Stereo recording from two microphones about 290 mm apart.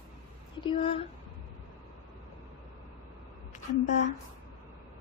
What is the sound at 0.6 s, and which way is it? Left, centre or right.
Speech, centre.